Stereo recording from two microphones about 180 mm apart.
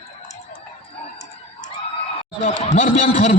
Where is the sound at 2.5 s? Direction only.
35° left (ahead or behind).